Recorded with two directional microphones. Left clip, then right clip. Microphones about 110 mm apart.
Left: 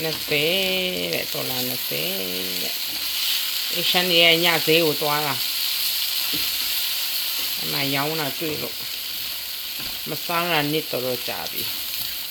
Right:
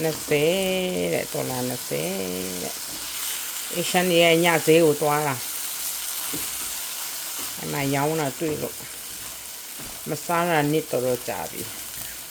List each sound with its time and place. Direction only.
0.0 s frying: 50° right (ahead or behind)
3.9 s frying: 55° right (ahead or behind)
7.7 s frying: 50° right (ahead or behind)
10.3 s frying: 35° right (ahead or behind)